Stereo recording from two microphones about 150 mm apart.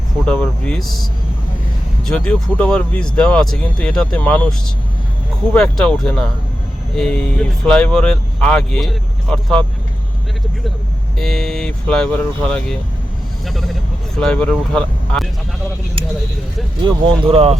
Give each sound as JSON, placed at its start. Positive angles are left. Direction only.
{"t": 0.3, "sound": "speech", "side_deg": 5}
{"t": 2.0, "sound": "speech", "side_deg": 5}
{"t": 5.5, "sound": "speech", "side_deg": 5}
{"t": 11.2, "sound": "speech", "side_deg": 0}
{"t": 16.8, "sound": "speech", "side_deg": -40}